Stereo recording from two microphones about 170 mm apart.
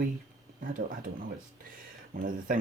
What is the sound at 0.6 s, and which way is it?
Speech, 50° right (ahead or behind).